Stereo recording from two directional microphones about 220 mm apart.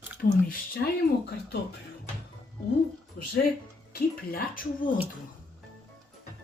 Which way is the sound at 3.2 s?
40° left (ahead or behind).